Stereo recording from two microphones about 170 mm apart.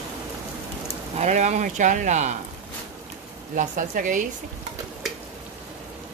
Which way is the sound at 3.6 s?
50° right (ahead or behind).